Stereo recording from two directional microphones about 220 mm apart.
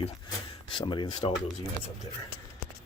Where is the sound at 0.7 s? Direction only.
20° left (ahead or behind).